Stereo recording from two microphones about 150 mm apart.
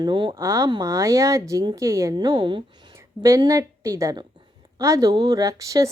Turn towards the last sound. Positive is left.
turn(degrees=-20)  # may be behind; listen again after turning